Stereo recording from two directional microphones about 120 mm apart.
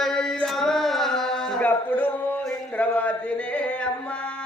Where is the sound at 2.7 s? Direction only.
10° left (ahead or behind).